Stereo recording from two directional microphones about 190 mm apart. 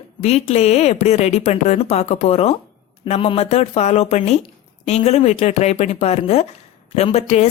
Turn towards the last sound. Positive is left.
turn(degrees=35)  # may be behind; listen again after turning